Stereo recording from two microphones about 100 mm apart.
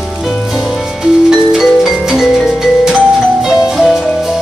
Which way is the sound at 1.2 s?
Centre (ahead or behind).